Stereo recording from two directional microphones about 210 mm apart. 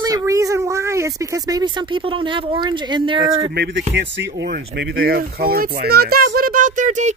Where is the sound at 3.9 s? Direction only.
55° right (ahead or behind).